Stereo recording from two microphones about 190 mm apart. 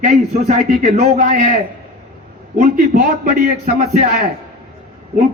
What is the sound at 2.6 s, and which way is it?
Speech, 40° right (ahead or behind).